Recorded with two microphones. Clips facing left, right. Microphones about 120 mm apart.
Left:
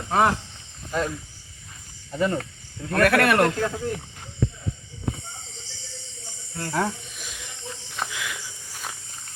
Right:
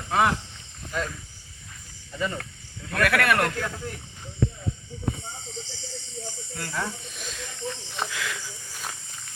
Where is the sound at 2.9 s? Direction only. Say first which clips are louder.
Left 4 dB; 35° left (ahead or behind).